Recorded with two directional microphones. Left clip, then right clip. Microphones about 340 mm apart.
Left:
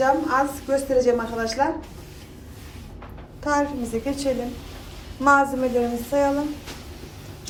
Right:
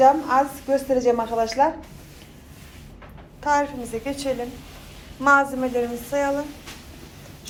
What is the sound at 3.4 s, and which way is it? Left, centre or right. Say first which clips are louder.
A woman's voice: right 1 dB; centre.